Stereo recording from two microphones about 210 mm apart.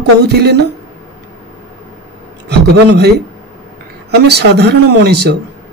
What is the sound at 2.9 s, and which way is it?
Speech, 50° right (ahead or behind).